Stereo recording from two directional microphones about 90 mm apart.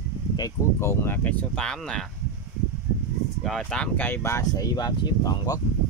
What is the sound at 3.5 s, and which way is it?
Speech, 10° left (ahead or behind).